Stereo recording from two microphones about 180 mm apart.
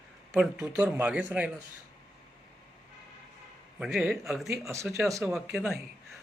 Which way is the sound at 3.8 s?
5° right (ahead or behind).